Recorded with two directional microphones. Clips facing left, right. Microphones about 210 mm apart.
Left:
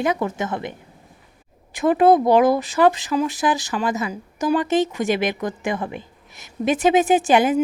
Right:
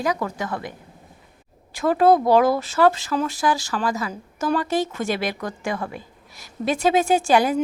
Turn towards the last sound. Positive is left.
turn(degrees=20)  # may be behind; listen again after turning